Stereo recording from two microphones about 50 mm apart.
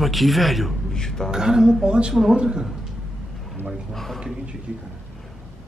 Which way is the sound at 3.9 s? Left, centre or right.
Centre.